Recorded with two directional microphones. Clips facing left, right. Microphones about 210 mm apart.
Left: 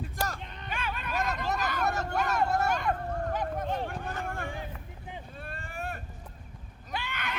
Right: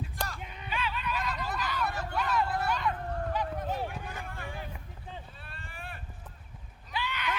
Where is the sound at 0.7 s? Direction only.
50° left (ahead or behind).